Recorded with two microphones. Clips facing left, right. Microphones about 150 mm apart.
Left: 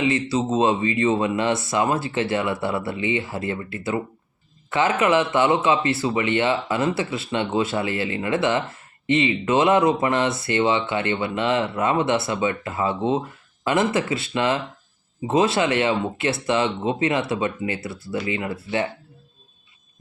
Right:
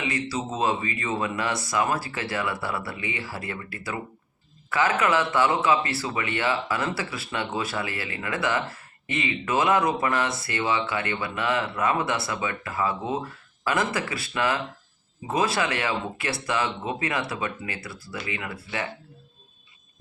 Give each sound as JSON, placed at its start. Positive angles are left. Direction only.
{"t": 0.3, "sound": "speech", "side_deg": 25}